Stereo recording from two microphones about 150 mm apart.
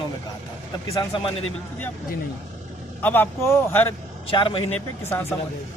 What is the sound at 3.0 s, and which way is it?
Speech, 15° left (ahead or behind).